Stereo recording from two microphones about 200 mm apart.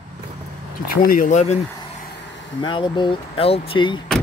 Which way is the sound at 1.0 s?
45° left (ahead or behind).